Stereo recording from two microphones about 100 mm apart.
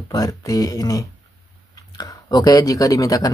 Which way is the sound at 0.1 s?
40° left (ahead or behind).